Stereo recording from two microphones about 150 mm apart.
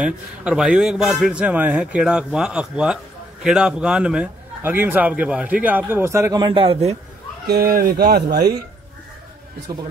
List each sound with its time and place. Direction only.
0.0 s a man's voice: 5° right (ahead or behind); by 7.0 s 40° right (ahead or behind)
7.4 s speech: 90° right